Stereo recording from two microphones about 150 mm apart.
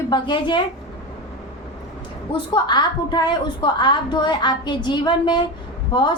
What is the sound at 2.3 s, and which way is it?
A woman's voice, 30° left (ahead or behind).